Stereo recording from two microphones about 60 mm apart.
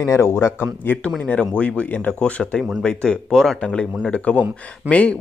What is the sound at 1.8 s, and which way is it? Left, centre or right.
Speech, left.